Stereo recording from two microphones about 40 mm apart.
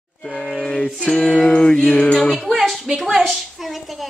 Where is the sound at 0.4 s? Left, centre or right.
Centre.